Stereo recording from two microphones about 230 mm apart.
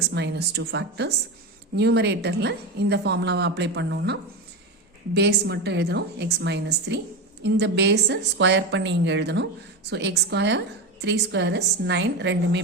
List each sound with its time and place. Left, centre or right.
0.1 s speech: right